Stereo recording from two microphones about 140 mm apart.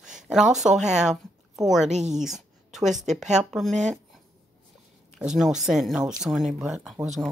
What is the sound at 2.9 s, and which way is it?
Speech, centre (ahead or behind).